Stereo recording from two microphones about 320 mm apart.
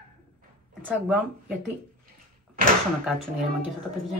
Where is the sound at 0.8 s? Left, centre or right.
Centre.